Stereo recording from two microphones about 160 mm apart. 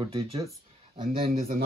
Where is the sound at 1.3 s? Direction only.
60° right (ahead or behind).